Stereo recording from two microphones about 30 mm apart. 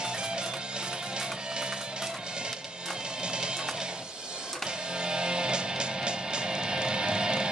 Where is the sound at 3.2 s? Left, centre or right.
Right.